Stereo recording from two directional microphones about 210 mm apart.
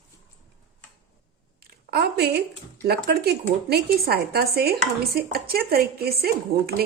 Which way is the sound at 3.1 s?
50° right (ahead or behind).